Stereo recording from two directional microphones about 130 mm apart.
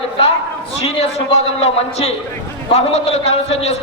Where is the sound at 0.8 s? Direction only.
50° left (ahead or behind).